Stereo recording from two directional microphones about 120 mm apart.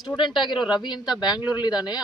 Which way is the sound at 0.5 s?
5° right (ahead or behind).